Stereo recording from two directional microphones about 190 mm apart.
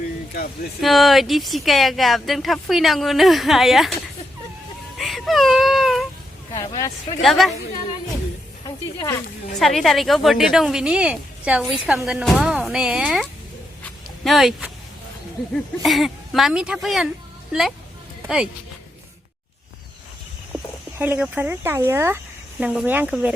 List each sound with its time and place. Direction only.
0.8 s a woman's voice: centre (ahead or behind)
4.9 s baby cry: centre (ahead or behind)
6.5 s speech: 20° left (ahead or behind)
7.2 s a woman's voice: centre (ahead or behind)
8.6 s a sound: 15° left (ahead or behind)
9.6 s a woman's voice: centre (ahead or behind)
14.3 s a woman's voice: centre (ahead or behind)
15.8 s a woman's voice: centre (ahead or behind)
21.0 s speech: 10° right (ahead or behind)